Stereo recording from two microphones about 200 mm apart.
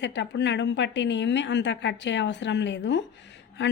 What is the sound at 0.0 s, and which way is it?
A woman's voice, 60° left (ahead or behind).